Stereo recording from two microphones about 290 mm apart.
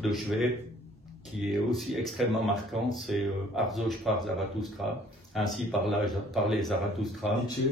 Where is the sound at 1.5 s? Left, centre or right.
Centre.